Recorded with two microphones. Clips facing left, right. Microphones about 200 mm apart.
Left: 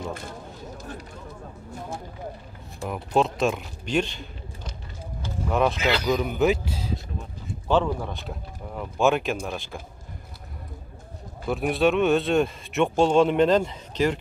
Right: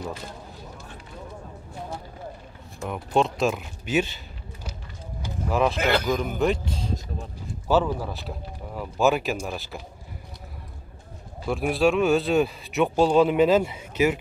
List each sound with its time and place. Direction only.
2.9 s speech: centre (ahead or behind)
5.8 s a man's voice: 50° right (ahead or behind)
6.0 s speech: centre (ahead or behind)
7.4 s speech: 5° right (ahead or behind)
11.4 s speech: centre (ahead or behind)